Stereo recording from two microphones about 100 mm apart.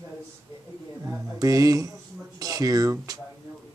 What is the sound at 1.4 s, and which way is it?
Speech, 35° right (ahead or behind).